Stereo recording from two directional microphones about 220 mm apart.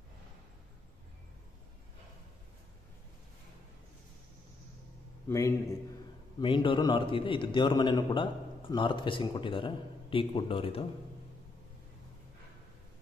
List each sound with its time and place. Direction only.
5.3 s a man's voice: 15° left (ahead or behind)